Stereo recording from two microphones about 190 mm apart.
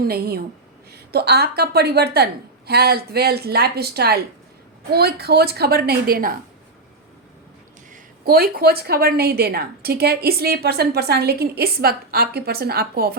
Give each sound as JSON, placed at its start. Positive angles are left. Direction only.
{"t": 0.0, "sound": "a woman's voice", "side_deg": -55}
{"t": 8.2, "sound": "a woman's voice", "side_deg": -50}